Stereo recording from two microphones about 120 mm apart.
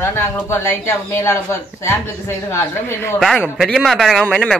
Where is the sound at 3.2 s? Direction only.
Centre (ahead or behind).